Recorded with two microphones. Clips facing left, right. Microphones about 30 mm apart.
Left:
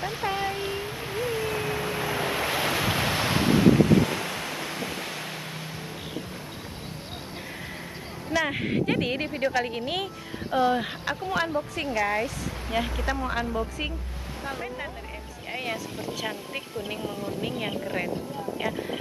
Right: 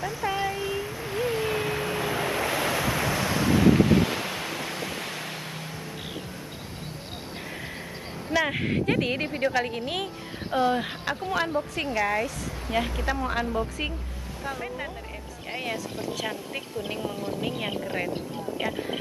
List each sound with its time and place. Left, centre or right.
0.0 s a sound: left
1.1 s a sound: centre
1.7 s waves: centre; by 3.5 s left
3.7 s waves: centre
8.3 s speech: centre
15.5 s speech: centre